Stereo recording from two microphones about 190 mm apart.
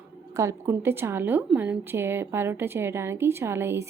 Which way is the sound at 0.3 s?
15° right (ahead or behind).